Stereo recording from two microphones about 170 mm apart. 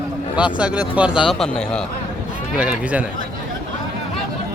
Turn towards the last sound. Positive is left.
turn(degrees=-10)  # may be behind; listen again after turning